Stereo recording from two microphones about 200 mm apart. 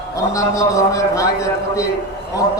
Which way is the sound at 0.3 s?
15° left (ahead or behind).